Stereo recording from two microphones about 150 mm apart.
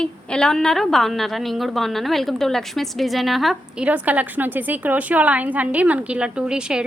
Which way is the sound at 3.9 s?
10° right (ahead or behind).